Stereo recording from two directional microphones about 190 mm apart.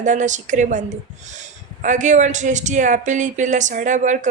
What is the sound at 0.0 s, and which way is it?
Speech, 40° right (ahead or behind).